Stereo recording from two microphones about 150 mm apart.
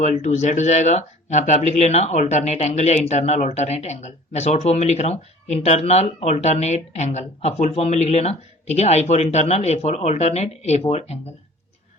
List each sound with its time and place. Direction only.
0.0 s speech: 50° left (ahead or behind)